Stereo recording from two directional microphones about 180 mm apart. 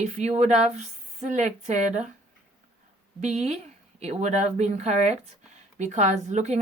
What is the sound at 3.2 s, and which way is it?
A woman's voice, 35° right (ahead or behind).